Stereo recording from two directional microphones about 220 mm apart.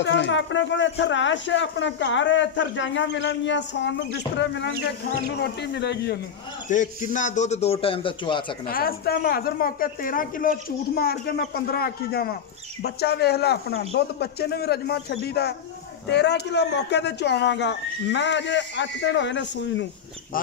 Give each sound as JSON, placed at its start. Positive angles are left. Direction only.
{"t": 0.0, "sound": "speech", "side_deg": 55}
{"t": 6.7, "sound": "a man's voice", "side_deg": 35}
{"t": 8.6, "sound": "speech", "side_deg": 40}